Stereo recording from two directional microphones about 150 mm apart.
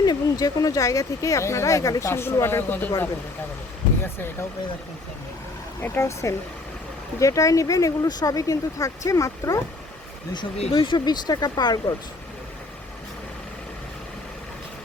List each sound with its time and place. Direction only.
0.0 s speech: 25° left (ahead or behind)
5.8 s speech: 15° left (ahead or behind)
10.8 s speech: 30° left (ahead or behind)